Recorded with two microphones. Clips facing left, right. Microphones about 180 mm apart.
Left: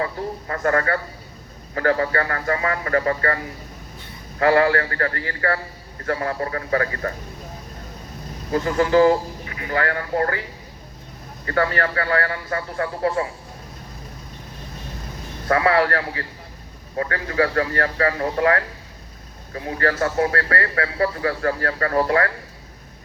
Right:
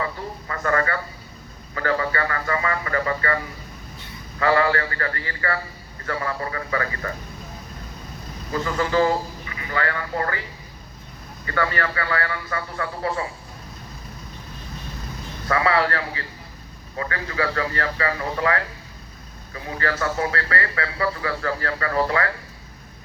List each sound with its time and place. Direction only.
0.0 s a man's voice: 45° left (ahead or behind)
8.5 s a man's voice: 50° left (ahead or behind)
11.4 s a man's voice: 45° left (ahead or behind)
15.4 s a man's voice: 45° left (ahead or behind)